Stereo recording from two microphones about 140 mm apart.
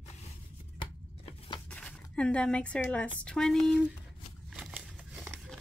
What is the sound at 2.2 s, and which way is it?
A woman's voice, 5° left (ahead or behind).